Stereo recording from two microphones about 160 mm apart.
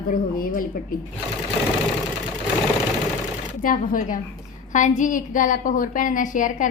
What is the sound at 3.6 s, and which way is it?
A woman's voice, 60° left (ahead or behind).